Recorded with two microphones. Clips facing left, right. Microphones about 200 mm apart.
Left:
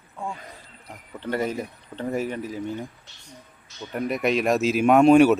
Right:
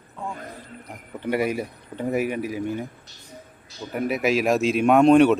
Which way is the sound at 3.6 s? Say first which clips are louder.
Right 2 dB; 35° right (ahead or behind).